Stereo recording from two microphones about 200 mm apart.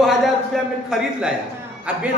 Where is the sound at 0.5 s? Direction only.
Centre (ahead or behind).